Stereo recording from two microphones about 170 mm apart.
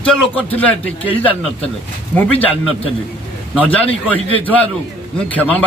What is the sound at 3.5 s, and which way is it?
Speech, 10° left (ahead or behind).